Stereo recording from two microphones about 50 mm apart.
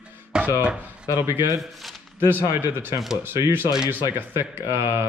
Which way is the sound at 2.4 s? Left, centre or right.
Right.